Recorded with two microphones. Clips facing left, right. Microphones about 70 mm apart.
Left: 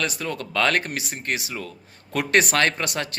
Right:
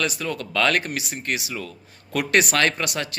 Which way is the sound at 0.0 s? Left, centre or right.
Left.